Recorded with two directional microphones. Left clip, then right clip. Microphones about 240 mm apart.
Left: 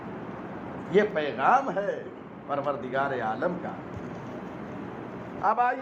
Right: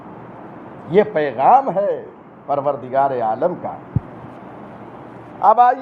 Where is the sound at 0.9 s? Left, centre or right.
Right.